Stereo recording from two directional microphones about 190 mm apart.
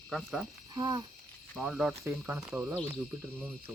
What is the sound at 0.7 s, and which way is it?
Speech, 20° right (ahead or behind).